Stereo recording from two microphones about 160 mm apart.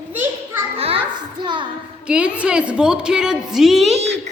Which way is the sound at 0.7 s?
40° right (ahead or behind).